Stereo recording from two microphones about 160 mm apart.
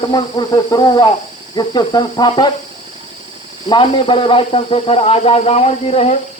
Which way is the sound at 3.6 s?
30° left (ahead or behind).